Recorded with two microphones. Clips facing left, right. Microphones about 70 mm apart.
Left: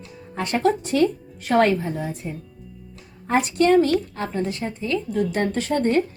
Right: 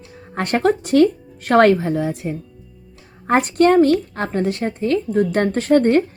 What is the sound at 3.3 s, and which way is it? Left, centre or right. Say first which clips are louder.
A woman's voice: right 4 dB; right.